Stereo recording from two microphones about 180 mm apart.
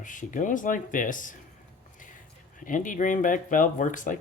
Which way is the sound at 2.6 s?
45° left (ahead or behind).